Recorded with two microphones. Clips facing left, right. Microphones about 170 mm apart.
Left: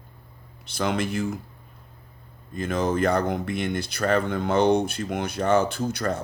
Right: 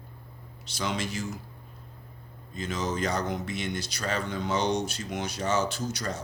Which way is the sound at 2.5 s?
55° left (ahead or behind).